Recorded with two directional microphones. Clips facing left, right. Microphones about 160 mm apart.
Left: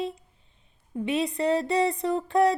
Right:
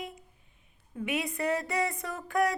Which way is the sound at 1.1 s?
30° left (ahead or behind).